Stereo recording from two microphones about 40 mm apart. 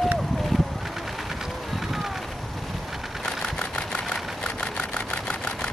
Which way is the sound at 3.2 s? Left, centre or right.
Left.